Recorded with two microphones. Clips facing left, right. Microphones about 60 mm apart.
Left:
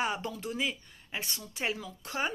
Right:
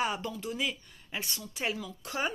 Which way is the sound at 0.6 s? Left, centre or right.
Left.